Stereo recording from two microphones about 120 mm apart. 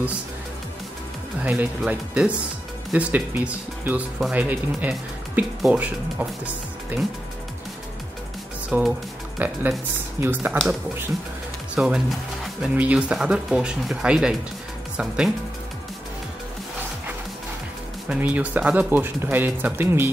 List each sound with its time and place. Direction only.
1.4 s speech: 10° right (ahead or behind)
8.6 s speech: 10° right (ahead or behind)
11.7 s speech: 5° right (ahead or behind)
18.0 s speech: 10° right (ahead or behind)